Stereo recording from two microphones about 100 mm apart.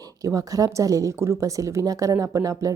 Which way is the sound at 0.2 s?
35° right (ahead or behind).